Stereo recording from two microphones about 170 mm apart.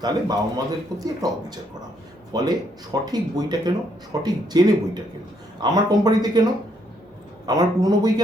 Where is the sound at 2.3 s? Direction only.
25° right (ahead or behind).